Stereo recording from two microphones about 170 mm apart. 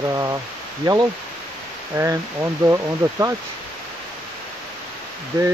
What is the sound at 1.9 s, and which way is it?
Speech, 15° right (ahead or behind).